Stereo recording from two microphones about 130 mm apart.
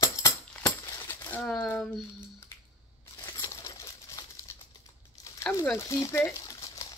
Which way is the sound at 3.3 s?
20° left (ahead or behind).